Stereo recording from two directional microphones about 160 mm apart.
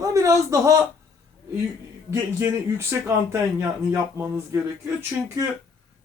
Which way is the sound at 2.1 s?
15° right (ahead or behind).